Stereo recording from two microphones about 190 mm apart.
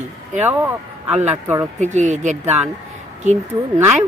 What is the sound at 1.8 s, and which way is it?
Speech, 40° right (ahead or behind).